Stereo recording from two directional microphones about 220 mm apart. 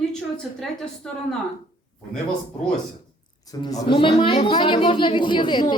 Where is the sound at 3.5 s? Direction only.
15° left (ahead or behind).